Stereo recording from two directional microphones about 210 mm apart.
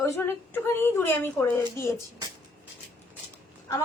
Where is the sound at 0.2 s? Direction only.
10° left (ahead or behind).